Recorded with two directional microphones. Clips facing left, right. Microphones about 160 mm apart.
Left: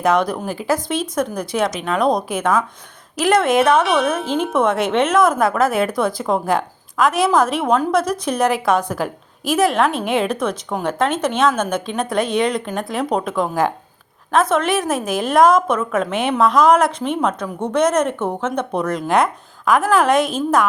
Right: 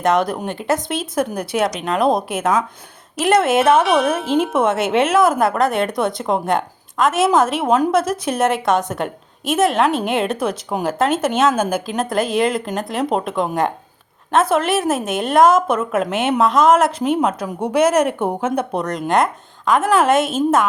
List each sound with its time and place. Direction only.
0.0 s a woman's voice: centre (ahead or behind)
10.5 s speech: 25° right (ahead or behind)
10.8 s a woman's voice: 5° right (ahead or behind)
18.8 s a woman's voice: centre (ahead or behind)